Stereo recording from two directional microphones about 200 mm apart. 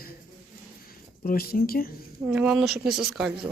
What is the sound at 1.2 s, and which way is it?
Speech, 50° left (ahead or behind).